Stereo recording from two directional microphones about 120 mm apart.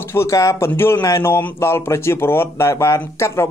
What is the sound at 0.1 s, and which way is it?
A man's voice, 25° left (ahead or behind).